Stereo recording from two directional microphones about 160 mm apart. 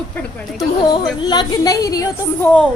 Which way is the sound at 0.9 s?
25° left (ahead or behind).